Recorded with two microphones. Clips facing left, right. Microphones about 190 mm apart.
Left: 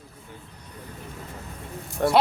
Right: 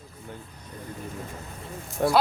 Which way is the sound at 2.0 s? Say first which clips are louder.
Left 1 dB; 10° right (ahead or behind).